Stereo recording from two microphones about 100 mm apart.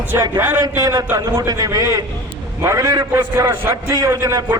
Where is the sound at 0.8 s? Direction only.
40° right (ahead or behind).